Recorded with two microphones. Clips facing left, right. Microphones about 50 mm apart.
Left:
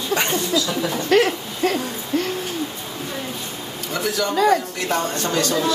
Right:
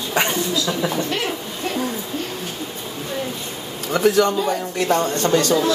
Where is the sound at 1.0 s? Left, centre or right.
Left.